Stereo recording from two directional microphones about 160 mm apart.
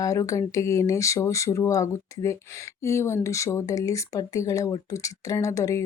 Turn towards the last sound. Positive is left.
turn(degrees=20)  # may be behind; listen again after turning